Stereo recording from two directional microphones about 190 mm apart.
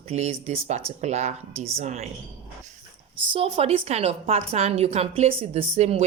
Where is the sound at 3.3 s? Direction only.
30° right (ahead or behind).